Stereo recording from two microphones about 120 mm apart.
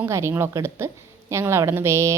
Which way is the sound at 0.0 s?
20° right (ahead or behind).